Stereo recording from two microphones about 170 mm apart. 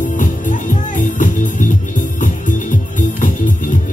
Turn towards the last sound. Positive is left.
turn(degrees=50)  # may be behind; listen again after turning